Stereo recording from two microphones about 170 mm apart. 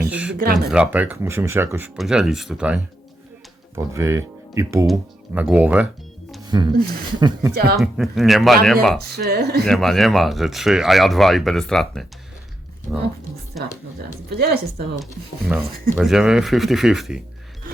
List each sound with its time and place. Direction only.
0.0 s a sound: 10° right (ahead or behind)
0.7 s speech: 5° right (ahead or behind)
2.0 s speech: centre (ahead or behind)
3.8 s speech: 15° right (ahead or behind)
6.4 s a sound: 25° right (ahead or behind)
6.7 s speech: 60° right (ahead or behind)
7.2 s speech: 25° right (ahead or behind)
7.5 s speech: 65° right (ahead or behind)
7.8 s speech: centre (ahead or behind)
9.0 s speech: 70° right (ahead or behind)
9.6 s speech: centre (ahead or behind)
14.3 s speech: 65° right (ahead or behind)
16.0 s speech: 5° right (ahead or behind)